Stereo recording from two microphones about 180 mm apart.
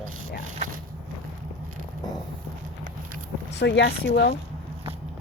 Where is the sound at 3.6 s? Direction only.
75° left (ahead or behind).